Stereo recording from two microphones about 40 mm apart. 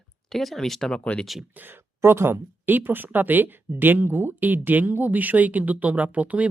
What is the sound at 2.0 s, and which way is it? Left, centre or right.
Speech, right.